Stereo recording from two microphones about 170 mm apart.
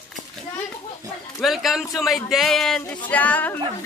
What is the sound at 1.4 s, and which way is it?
A man's voice, centre (ahead or behind).